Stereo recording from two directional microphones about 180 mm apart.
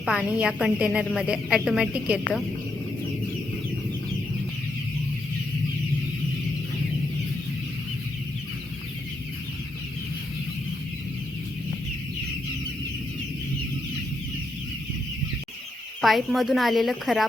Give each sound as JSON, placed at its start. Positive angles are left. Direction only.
{"t": 0.0, "sound": "a woman's voice", "side_deg": -5}
{"t": 16.0, "sound": "a woman's voice", "side_deg": 0}